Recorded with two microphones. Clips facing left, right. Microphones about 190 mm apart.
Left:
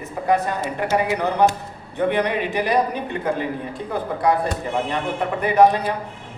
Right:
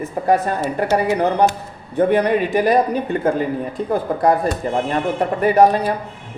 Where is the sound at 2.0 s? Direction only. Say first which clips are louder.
Right 5 dB; 40° right (ahead or behind).